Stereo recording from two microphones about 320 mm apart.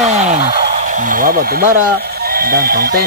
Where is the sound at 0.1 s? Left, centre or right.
Right.